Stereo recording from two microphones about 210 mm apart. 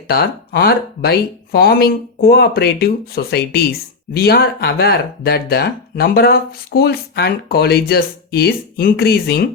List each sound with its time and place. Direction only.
0.1 s speech: 50° left (ahead or behind)